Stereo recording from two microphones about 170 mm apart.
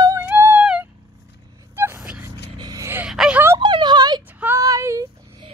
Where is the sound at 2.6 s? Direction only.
20° right (ahead or behind).